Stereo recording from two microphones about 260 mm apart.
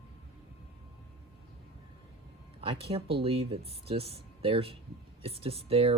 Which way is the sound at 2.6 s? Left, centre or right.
Right.